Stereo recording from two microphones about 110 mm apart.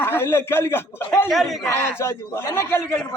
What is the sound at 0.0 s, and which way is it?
A man's voice, 20° left (ahead or behind).